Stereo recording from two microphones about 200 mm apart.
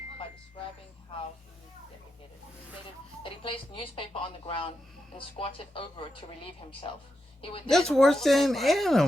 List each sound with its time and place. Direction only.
3.2 s speech: 25° left (ahead or behind)
7.7 s speech: centre (ahead or behind)